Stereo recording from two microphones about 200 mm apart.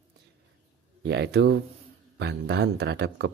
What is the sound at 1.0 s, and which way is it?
Speech, 55° right (ahead or behind).